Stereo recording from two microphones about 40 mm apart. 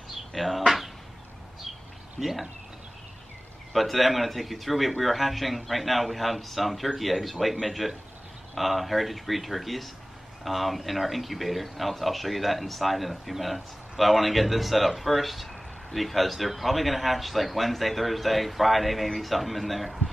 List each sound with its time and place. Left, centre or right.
0.3 s a sound: centre
2.1 s speech: centre
3.7 s speech: centre